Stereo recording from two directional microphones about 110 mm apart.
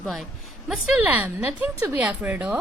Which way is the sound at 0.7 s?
5° right (ahead or behind).